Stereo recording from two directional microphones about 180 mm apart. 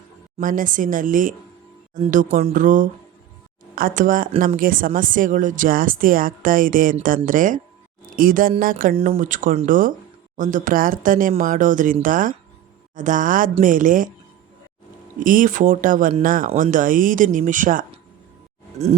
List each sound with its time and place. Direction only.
0.3 s speech: 50° right (ahead or behind)
15.2 s speech: 50° right (ahead or behind)
16.5 s speech: 35° right (ahead or behind)
16.7 s speech: 50° right (ahead or behind)